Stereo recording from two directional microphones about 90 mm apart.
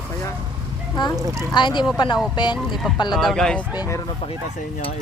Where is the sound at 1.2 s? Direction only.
40° right (ahead or behind).